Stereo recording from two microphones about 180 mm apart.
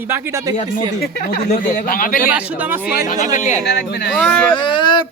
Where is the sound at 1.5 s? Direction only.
50° left (ahead or behind).